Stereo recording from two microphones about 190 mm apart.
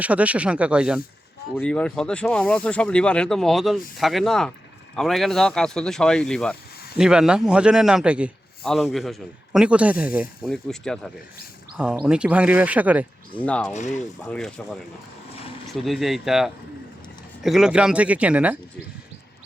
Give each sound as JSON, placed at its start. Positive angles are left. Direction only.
{"t": 0.0, "sound": "speech", "side_deg": -5}
{"t": 1.5, "sound": "a man's voice", "side_deg": 5}
{"t": 13.4, "sound": "speech", "side_deg": 5}
{"t": 13.7, "sound": "speech", "side_deg": 40}
{"t": 14.3, "sound": "a man's voice", "side_deg": 5}
{"t": 15.3, "sound": "vehicle", "side_deg": 30}
{"t": 15.7, "sound": "a man's voice", "side_deg": 0}